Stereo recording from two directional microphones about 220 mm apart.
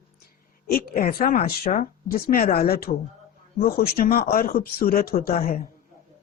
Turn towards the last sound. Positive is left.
turn(degrees=40)  # may be behind; listen again after turning